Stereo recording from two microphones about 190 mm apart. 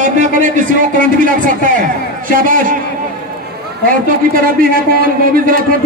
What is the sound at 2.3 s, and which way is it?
Speech, 45° right (ahead or behind).